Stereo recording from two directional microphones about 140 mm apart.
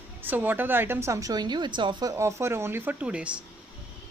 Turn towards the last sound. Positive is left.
turn(degrees=-10)  # may be behind; listen again after turning